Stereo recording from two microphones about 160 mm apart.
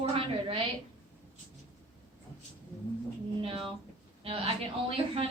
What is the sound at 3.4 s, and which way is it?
A woman's voice, 35° right (ahead or behind).